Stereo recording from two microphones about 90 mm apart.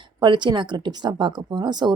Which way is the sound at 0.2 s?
60° right (ahead or behind).